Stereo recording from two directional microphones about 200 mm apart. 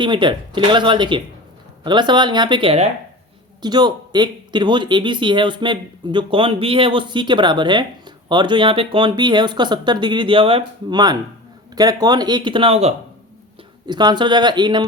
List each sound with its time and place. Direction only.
0.0 s speech: 25° right (ahead or behind)